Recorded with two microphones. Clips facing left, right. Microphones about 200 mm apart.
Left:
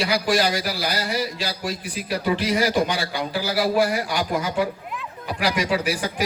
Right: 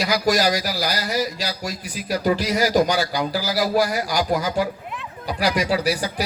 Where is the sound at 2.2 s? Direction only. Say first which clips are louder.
Right 1 dB; 40° right (ahead or behind).